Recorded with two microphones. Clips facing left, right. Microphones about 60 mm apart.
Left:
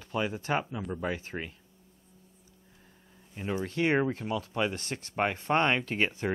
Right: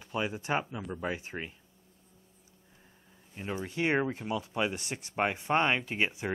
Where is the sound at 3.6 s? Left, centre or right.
Centre.